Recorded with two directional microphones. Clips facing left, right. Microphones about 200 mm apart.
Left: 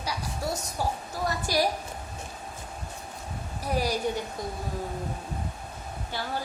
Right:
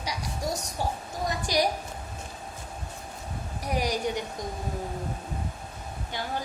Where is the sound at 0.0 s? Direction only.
15° right (ahead or behind).